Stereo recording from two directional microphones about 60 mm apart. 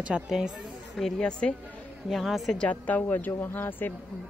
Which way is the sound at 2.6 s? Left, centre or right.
Left.